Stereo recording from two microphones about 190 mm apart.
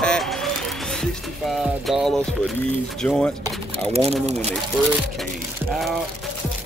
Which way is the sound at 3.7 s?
30° right (ahead or behind).